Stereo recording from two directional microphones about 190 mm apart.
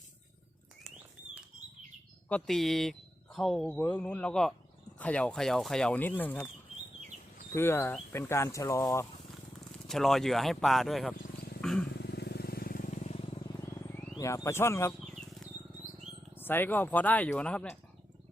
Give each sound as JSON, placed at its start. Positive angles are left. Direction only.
{"t": 2.3, "sound": "speech", "side_deg": 0}
{"t": 7.5, "sound": "speech", "side_deg": 10}
{"t": 9.8, "sound": "speech", "side_deg": 0}
{"t": 11.6, "sound": "wild animals", "side_deg": 5}
{"t": 11.9, "sound": "vehicle", "side_deg": 60}
{"t": 14.2, "sound": "speech", "side_deg": 15}
{"t": 16.3, "sound": "speech", "side_deg": 10}